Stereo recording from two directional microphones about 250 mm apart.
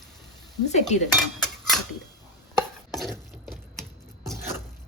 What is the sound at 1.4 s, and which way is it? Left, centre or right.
Cutlery, centre.